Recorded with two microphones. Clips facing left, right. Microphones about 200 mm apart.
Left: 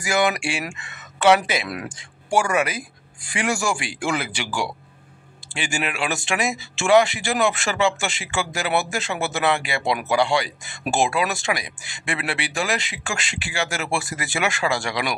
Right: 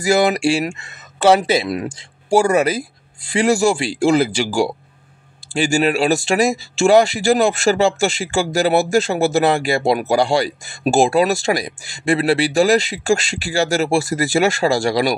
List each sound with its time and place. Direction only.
0.0 s speech: 35° right (ahead or behind)